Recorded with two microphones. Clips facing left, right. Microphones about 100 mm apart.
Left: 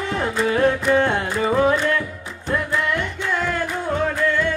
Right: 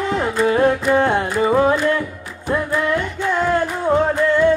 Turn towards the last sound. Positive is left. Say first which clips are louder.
# right 6 dB
turn(degrees=-25)  # may be behind; listen again after turning